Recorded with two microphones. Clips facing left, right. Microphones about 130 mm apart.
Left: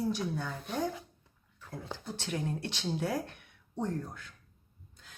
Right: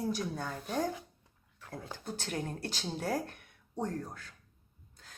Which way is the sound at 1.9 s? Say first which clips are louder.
Left 1 dB; 45° right (ahead or behind).